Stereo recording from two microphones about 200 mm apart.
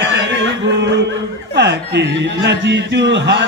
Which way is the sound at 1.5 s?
60° right (ahead or behind).